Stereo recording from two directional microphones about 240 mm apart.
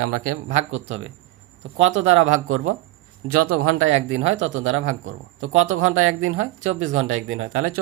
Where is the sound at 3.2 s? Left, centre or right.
Right.